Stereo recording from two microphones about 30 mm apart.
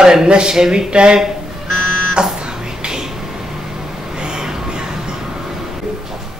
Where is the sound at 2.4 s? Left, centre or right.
Right.